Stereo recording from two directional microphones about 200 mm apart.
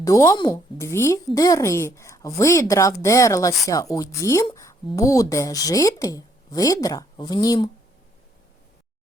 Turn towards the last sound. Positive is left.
turn(degrees=20)  # may be behind; listen again after turning